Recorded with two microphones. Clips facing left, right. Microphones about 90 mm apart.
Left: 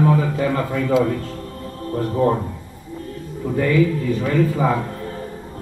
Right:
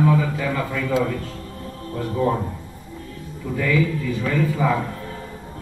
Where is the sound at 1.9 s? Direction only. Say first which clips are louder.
Left 3 dB; 40° left (ahead or behind).